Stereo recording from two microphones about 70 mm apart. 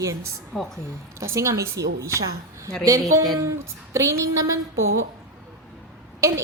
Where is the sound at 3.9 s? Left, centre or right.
Right.